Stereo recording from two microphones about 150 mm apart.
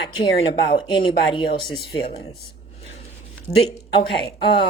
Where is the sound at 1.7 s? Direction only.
90° left.